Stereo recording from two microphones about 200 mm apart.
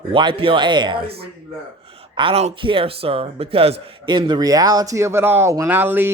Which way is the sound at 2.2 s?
30° right (ahead or behind).